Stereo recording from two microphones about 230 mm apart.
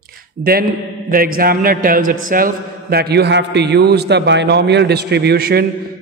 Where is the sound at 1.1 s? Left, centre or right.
Right.